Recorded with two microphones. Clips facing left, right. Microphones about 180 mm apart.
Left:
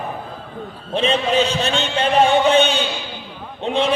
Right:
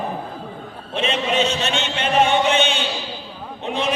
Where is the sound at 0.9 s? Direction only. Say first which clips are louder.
Left 3 dB; 35° left (ahead or behind).